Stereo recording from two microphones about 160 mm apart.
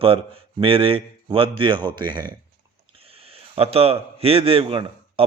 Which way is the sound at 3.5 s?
40° right (ahead or behind).